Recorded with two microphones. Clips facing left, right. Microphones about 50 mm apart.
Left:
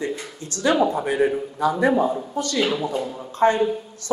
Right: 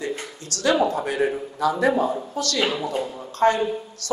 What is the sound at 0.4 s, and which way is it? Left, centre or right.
Speech, left.